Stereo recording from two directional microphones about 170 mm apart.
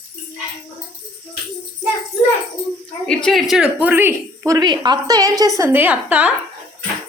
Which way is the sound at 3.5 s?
5° right (ahead or behind).